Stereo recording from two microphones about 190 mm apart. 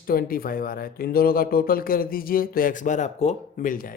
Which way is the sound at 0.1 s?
50° left (ahead or behind).